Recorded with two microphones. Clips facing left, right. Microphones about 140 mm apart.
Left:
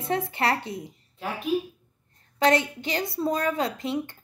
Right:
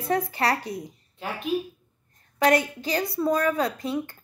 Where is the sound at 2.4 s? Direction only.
25° left (ahead or behind).